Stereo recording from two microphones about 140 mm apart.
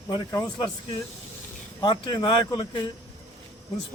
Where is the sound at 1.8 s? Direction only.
35° left (ahead or behind).